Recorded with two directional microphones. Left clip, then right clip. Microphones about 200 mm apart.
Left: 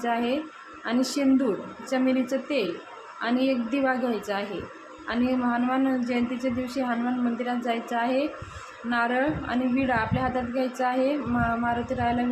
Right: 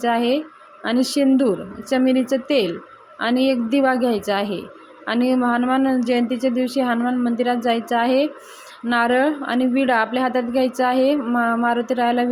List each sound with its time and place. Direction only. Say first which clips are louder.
0.0 s a woman's voice: right 7 dB; 40° right (ahead or behind)